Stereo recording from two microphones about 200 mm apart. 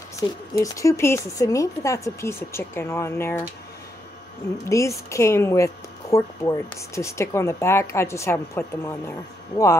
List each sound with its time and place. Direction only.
0.2 s speech: 20° left (ahead or behind)
4.6 s speech: 15° left (ahead or behind)